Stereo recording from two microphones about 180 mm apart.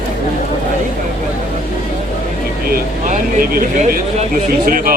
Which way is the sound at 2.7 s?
50° right (ahead or behind).